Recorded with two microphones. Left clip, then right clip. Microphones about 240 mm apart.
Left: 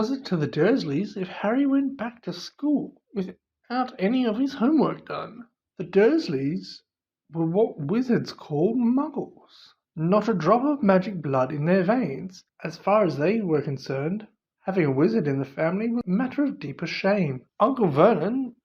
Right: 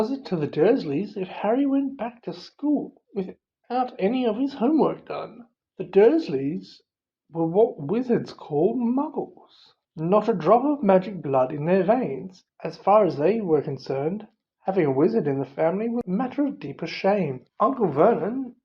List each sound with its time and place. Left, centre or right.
0.0 s speech: left